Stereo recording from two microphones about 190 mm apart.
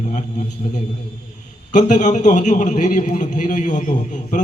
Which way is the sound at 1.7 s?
40° left (ahead or behind).